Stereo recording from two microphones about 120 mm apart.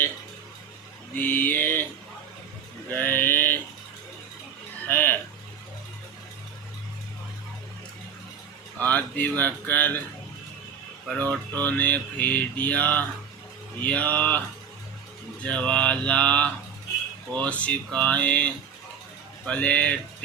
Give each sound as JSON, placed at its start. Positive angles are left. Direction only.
{"t": 1.1, "sound": "a sound", "side_deg": 15}
{"t": 2.9, "sound": "mantra", "side_deg": 15}
{"t": 4.9, "sound": "a sound", "side_deg": 15}
{"t": 8.8, "sound": "speech", "side_deg": 15}
{"t": 11.3, "sound": "mantra", "side_deg": 15}
{"t": 15.4, "sound": "mantra", "side_deg": 10}